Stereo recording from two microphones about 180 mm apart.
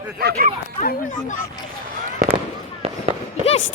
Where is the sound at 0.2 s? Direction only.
60° right (ahead or behind).